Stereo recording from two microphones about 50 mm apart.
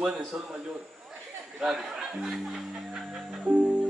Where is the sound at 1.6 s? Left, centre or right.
Centre.